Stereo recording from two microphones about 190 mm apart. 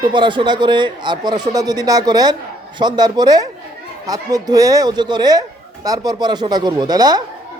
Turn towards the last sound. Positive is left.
turn(degrees=-20)  # may be behind; listen again after turning